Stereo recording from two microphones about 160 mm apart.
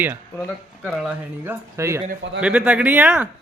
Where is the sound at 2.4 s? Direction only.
5° right (ahead or behind).